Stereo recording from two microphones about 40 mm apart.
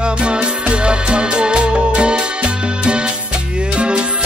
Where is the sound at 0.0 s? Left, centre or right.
Right.